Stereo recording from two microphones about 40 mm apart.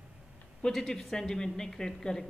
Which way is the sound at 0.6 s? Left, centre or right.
Centre.